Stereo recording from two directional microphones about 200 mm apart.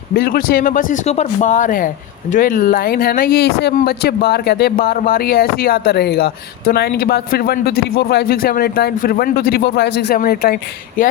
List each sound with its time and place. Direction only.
0.1 s speech: 50° left (ahead or behind)